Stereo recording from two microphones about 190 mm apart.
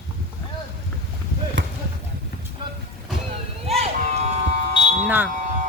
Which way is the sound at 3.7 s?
35° right (ahead or behind).